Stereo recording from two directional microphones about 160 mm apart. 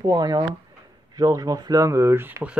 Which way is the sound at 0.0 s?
25° right (ahead or behind).